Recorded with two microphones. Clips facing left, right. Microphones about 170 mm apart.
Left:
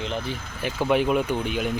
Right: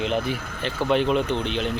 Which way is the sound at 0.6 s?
10° left (ahead or behind).